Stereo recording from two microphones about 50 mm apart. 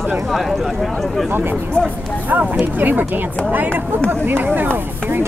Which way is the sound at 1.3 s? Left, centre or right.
Right.